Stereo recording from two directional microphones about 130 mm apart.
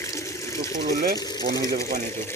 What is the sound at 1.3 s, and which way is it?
Speech, 25° left (ahead or behind).